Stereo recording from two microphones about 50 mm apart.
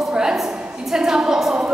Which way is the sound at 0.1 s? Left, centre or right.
Centre.